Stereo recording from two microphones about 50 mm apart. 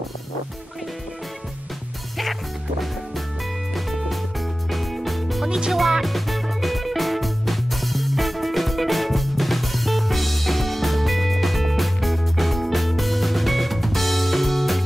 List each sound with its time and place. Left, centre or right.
3.7 s music: centre